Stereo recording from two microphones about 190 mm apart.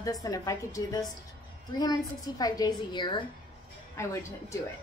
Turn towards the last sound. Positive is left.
turn(degrees=15)  # may be behind; listen again after turning